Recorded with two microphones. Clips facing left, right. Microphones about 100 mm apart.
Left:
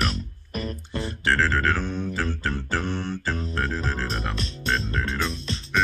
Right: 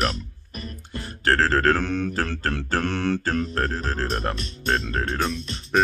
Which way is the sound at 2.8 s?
65° right (ahead or behind).